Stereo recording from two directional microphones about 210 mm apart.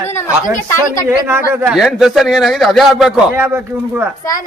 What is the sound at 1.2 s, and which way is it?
A man's voice, 10° right (ahead or behind).